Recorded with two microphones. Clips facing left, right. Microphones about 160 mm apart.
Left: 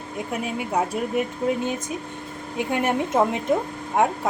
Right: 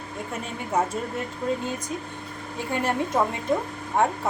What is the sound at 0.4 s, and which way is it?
Speech, 10° left (ahead or behind).